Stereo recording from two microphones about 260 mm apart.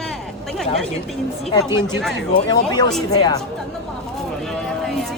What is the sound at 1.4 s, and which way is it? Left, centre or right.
Speech, left.